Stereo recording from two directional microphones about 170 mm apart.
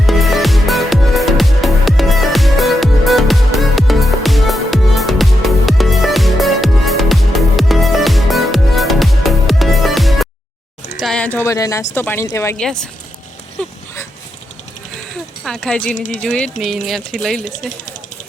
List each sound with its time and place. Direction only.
0.0 s music: centre (ahead or behind)
11.0 s speech: 5° left (ahead or behind)
12.5 s speech: 5° left (ahead or behind)
15.4 s speech: 5° left (ahead or behind)
16.0 s speech: 45° left (ahead or behind)
16.2 s speech: 5° left (ahead or behind)